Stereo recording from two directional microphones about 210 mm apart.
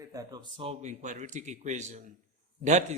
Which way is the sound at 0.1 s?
15° right (ahead or behind).